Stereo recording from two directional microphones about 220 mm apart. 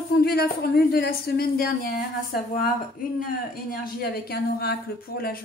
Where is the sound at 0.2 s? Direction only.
45° left (ahead or behind).